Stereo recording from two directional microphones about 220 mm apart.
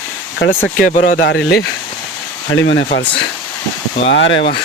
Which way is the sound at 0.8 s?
35° left (ahead or behind).